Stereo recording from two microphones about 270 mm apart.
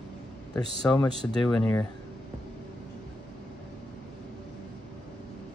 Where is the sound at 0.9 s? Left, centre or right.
Centre.